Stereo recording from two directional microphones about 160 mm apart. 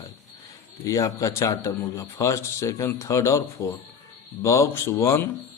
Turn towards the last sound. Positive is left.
turn(degrees=15)  # may be behind; listen again after turning